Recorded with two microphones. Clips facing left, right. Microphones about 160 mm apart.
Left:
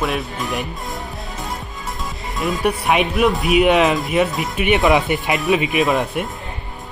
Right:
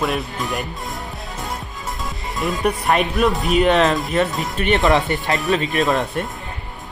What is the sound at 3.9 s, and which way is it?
Speech, centre (ahead or behind).